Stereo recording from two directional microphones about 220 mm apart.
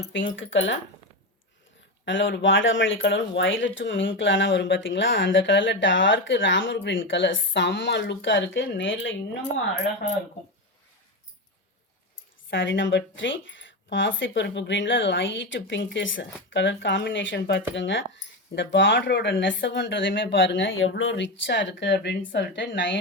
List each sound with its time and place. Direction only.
0.1 s a woman's voice: 55° left (ahead or behind)
2.0 s a woman's voice: 55° left (ahead or behind)
12.5 s a woman's voice: 55° left (ahead or behind)